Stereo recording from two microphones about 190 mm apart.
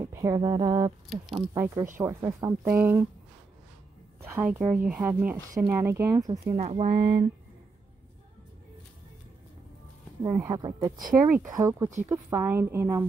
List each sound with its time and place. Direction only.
0.0 s speech: 15° right (ahead or behind)
1.0 s speech: centre (ahead or behind)
1.5 s speech: 15° right (ahead or behind)
4.2 s speech: 10° right (ahead or behind)
6.4 s speech: 30° right (ahead or behind)
10.2 s speech: 20° right (ahead or behind)